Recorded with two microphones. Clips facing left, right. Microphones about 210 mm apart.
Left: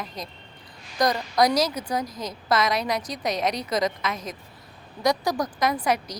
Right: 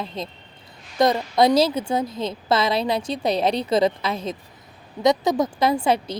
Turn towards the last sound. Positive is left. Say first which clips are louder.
# right 4 dB
turn(degrees=-25)  # may be behind; listen again after turning